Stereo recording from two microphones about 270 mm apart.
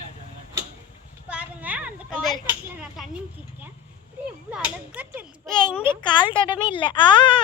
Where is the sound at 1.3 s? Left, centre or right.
Centre.